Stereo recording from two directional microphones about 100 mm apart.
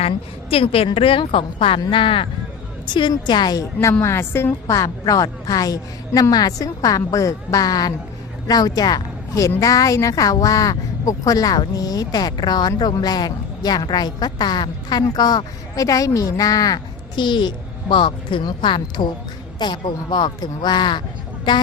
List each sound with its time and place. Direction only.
0.5 s a woman's voice: 70° left (ahead or behind)
2.9 s a woman's voice: 50° left (ahead or behind); by 4.5 s 25° left (ahead or behind)
4.6 s a woman's voice: 35° left (ahead or behind); by 21.6 s 50° left (ahead or behind)